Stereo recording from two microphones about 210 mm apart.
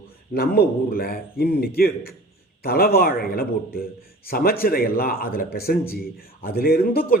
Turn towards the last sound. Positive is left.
turn(degrees=45)  # may be behind; listen again after turning